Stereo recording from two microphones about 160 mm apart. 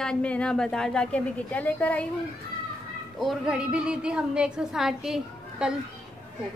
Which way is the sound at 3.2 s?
Centre (ahead or behind).